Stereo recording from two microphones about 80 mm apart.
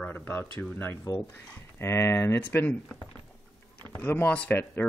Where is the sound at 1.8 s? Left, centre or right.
Left.